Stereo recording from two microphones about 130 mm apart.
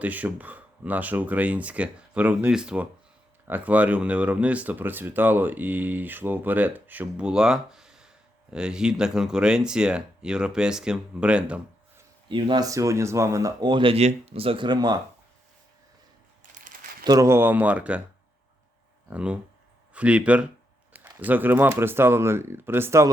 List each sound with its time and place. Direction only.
0.0 s speech: 10° right (ahead or behind)
12.3 s speech: 40° right (ahead or behind)
12.6 s speech: 25° right (ahead or behind)
16.4 s a sound: 90° right
17.0 s speech: 30° right (ahead or behind); by 18.0 s 10° right (ahead or behind)
19.1 s speech: 10° right (ahead or behind)